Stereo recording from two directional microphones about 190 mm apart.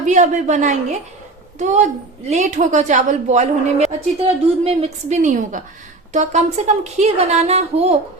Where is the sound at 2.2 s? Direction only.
35° right (ahead or behind).